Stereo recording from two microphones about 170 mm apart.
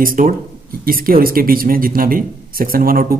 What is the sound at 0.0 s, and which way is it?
Speech, 55° right (ahead or behind).